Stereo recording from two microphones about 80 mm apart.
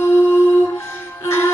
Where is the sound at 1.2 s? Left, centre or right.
Left.